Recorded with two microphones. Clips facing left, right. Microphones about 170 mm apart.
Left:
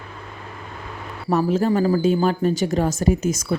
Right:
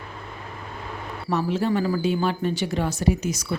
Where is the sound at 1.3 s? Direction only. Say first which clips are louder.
Left 4 dB; 45° left (ahead or behind).